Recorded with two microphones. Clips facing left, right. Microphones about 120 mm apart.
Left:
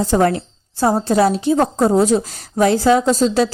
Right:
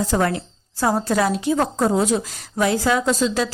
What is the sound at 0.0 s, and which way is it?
A woman's voice, 35° left (ahead or behind).